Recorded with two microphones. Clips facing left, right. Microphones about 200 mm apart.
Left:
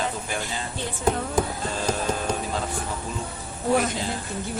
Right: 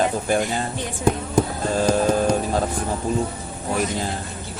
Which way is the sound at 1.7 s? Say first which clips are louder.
Right 9 dB; 45° right (ahead or behind).